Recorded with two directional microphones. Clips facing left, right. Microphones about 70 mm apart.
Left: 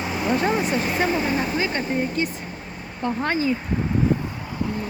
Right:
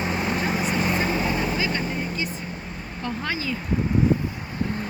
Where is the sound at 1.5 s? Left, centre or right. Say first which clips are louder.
Left 3 dB; left.